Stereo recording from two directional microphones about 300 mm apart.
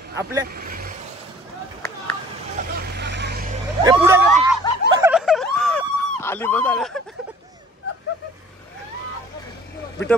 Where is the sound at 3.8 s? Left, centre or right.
Centre.